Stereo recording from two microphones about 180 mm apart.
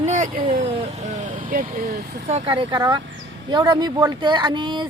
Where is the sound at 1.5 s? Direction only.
50° right (ahead or behind).